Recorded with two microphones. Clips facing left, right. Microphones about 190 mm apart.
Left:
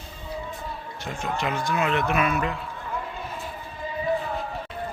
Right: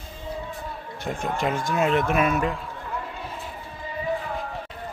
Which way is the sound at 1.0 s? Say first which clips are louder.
Right 3 dB; 55° right (ahead or behind).